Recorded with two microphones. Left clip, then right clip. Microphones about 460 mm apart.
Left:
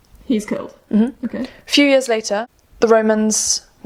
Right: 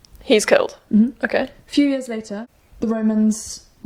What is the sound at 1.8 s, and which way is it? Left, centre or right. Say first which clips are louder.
A woman's voice: left 8 dB; left.